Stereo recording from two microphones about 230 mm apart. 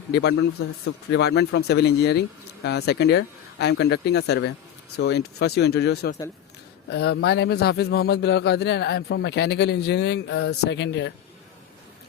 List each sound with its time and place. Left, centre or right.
0.1 s a man's voice: left